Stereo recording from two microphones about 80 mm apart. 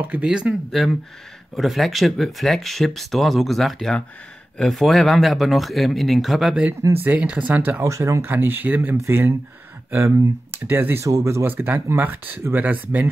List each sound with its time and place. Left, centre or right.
0.0 s speech: centre
6.9 s speech: right
7.8 s speech: right
11.1 s speech: right
11.4 s speech: right